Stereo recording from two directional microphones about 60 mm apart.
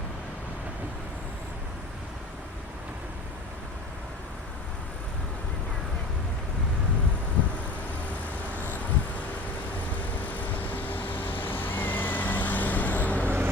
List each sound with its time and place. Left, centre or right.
10.2 s vehicle: left